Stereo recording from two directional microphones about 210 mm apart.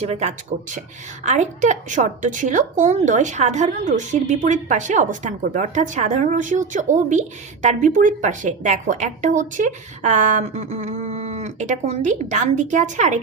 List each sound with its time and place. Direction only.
0.0 s a woman's voice: 30° right (ahead or behind)